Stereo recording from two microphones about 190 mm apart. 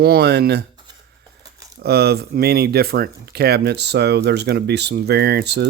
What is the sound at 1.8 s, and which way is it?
Speech, 55° right (ahead or behind).